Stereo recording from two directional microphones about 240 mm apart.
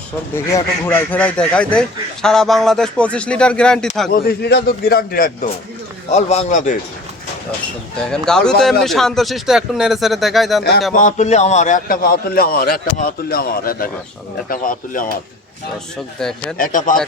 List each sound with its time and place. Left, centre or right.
0.3 s speech: centre
4.1 s a man's voice: left
7.9 s speech: centre
10.6 s speech: left
10.9 s a man's voice: left
16.2 s speech: centre
16.6 s a man's voice: left